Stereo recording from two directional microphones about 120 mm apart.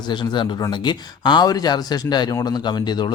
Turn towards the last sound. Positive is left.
turn(degrees=35)  # may be behind; listen again after turning